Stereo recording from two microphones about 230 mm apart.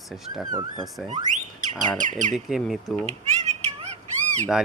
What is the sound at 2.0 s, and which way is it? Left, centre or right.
Speech, right.